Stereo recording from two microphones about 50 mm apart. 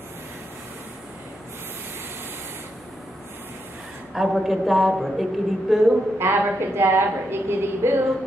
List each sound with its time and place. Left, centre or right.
4.1 s a woman's voice: centre
6.1 s a woman's voice: right